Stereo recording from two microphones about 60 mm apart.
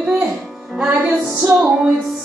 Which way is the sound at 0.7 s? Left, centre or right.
Centre.